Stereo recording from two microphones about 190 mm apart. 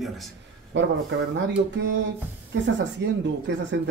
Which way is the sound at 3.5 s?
70° right (ahead or behind).